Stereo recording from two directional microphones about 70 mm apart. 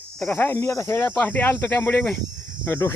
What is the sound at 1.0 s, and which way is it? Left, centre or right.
Speech, left.